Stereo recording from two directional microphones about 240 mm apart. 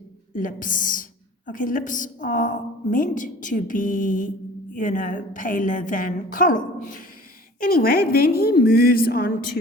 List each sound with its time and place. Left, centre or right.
0.3 s a woman's voice: left